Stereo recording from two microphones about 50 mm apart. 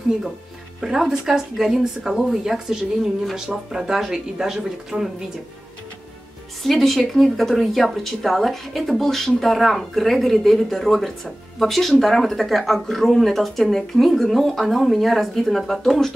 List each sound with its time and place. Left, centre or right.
0.7 s speech: centre
6.6 s speech: centre